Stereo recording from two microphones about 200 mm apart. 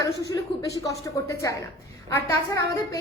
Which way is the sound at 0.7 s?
15° left (ahead or behind).